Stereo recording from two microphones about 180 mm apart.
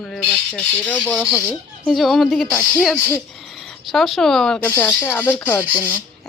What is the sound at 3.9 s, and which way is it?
Speech, centre (ahead or behind).